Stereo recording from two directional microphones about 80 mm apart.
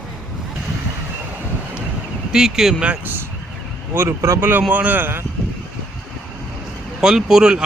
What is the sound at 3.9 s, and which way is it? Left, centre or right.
Speech, right.